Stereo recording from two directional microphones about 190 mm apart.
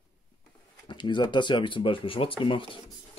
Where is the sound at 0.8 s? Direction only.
25° left (ahead or behind).